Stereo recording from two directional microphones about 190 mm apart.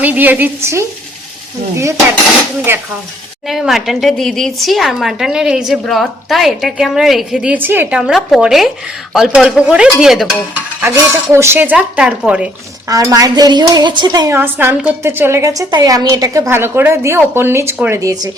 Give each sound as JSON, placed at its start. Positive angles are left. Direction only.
{"t": 0.0, "sound": "dishes", "side_deg": -10}
{"t": 3.4, "sound": "speech", "side_deg": 0}
{"t": 12.9, "sound": "dishes", "side_deg": -20}